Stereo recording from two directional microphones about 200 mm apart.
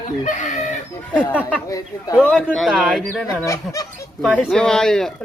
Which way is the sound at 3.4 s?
15° left (ahead or behind).